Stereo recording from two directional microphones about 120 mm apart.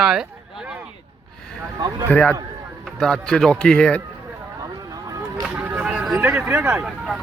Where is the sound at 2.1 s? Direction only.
10° left (ahead or behind).